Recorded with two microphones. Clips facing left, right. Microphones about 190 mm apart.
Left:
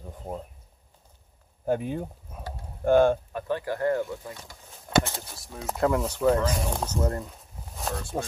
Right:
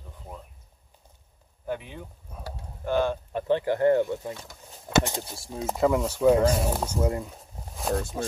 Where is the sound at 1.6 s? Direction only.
45° left (ahead or behind).